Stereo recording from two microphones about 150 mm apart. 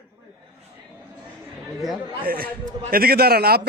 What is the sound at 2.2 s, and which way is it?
Speech, 80° right.